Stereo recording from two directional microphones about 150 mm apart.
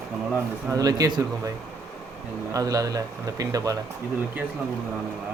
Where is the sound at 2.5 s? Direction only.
25° right (ahead or behind).